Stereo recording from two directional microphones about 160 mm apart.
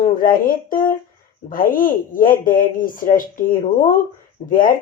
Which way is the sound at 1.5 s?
60° left (ahead or behind).